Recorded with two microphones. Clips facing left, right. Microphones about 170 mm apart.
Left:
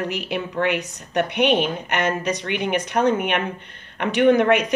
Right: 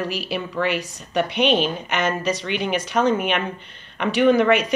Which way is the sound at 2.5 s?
15° left (ahead or behind).